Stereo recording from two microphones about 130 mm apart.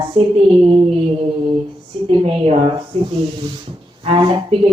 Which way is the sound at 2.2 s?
40° right (ahead or behind).